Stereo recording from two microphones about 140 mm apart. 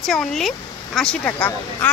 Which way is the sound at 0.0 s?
Centre (ahead or behind).